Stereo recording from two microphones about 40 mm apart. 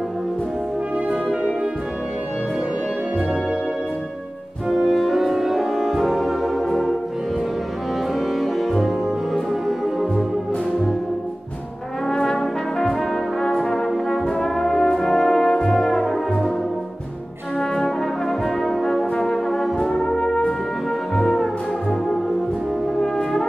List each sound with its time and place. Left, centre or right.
4.6 s music: centre
8.3 s music: centre
12.1 s brass instrument: centre
17.6 s brass instrument: centre
19.8 s brass instrument: centre
21.1 s music: centre